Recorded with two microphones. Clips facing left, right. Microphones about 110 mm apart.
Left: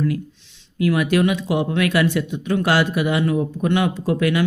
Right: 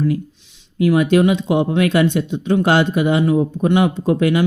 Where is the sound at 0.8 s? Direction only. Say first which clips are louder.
Right 4 dB; 25° right (ahead or behind).